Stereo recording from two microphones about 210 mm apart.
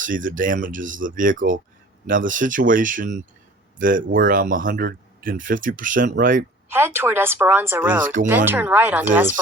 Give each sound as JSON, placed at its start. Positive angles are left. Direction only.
{"t": 0.0, "sound": "speech", "side_deg": -40}
{"t": 6.7, "sound": "a woman's voice", "side_deg": -10}